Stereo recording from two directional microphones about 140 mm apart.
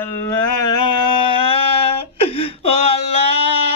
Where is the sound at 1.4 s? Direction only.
45° left (ahead or behind).